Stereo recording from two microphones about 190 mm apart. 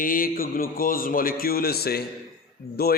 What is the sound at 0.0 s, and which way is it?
A man's voice, 45° left (ahead or behind).